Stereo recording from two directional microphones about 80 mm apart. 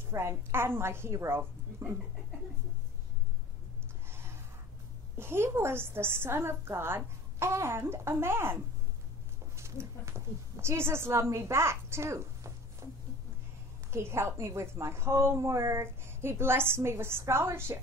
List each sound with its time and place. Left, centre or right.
0.1 s a woman's voice: right
4.1 s a sound: right
5.1 s a woman's voice: right
9.6 s a woman's voice: right
13.9 s a woman's voice: right